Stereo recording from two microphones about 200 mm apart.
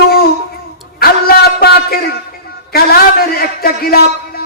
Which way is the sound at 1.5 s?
50° left (ahead or behind).